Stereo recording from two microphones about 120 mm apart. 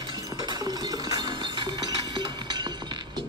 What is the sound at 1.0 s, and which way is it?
Chink, 35° right (ahead or behind).